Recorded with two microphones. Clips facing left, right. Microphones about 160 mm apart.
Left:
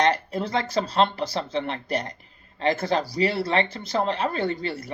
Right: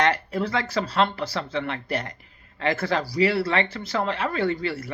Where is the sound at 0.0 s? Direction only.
20° left (ahead or behind).